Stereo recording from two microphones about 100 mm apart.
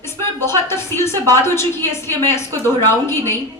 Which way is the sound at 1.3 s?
25° left (ahead or behind).